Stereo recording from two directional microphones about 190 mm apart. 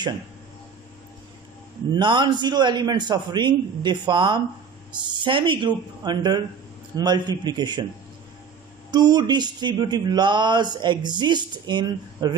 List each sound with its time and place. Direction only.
1.9 s speech: 25° right (ahead or behind)
8.9 s speech: 20° right (ahead or behind)